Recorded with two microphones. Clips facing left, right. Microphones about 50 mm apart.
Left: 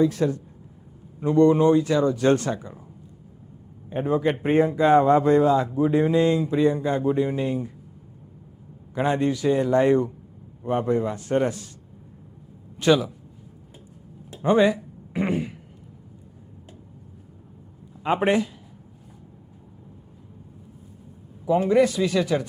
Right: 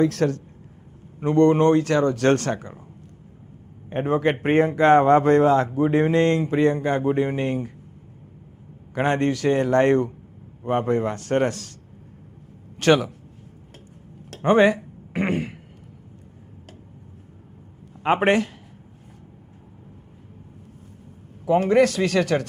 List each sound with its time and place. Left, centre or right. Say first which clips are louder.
0.0 s speech: right 1 dB; right
1.2 s speech: right 1 dB; right
3.8 s speech: right 1 dB; right
9.0 s speech: right 1 dB; right
12.7 s speech: right 1 dB; right
14.3 s a sound: right 2 dB; right
18.0 s a man's voice: right 3 dB; right
21.4 s speech: right 2 dB; right